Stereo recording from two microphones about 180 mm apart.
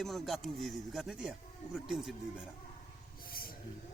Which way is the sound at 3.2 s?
55° left (ahead or behind).